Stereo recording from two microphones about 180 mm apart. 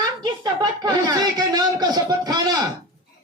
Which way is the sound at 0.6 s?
20° right (ahead or behind).